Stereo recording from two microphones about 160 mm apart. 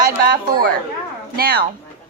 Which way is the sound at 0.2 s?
65° right (ahead or behind).